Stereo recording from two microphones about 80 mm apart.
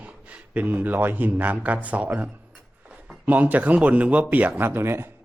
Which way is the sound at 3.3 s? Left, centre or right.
Right.